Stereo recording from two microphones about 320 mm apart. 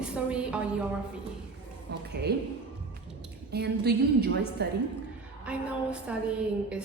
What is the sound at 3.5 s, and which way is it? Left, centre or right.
A woman's voice, right.